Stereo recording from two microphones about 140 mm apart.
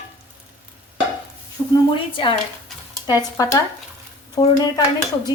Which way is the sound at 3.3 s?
25° left (ahead or behind).